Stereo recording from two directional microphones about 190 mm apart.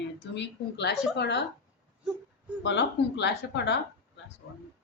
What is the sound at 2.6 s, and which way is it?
A woman's voice, 70° left (ahead or behind).